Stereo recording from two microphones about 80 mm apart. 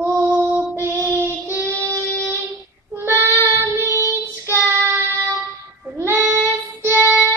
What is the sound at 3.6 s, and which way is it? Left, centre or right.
Child singing, right.